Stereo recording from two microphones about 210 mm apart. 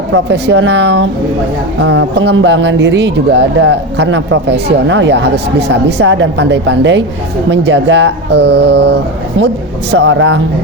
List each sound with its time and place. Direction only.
0.1 s speech: 55° right (ahead or behind)